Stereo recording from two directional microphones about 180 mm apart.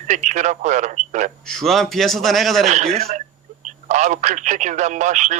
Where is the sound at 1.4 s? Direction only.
Centre (ahead or behind).